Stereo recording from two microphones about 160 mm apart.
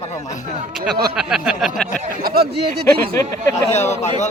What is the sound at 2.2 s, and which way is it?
Speech, 70° right (ahead or behind).